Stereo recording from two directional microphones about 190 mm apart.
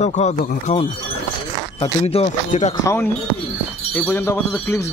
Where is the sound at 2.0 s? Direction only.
35° left (ahead or behind).